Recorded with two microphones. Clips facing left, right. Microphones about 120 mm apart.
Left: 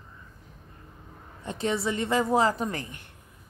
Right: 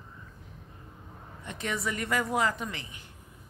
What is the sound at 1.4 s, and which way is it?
A woman's voice, 30° left (ahead or behind).